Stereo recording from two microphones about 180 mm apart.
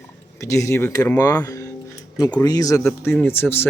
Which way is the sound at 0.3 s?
15° left (ahead or behind).